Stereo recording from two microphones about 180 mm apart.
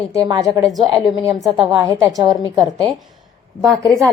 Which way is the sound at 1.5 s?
20° right (ahead or behind).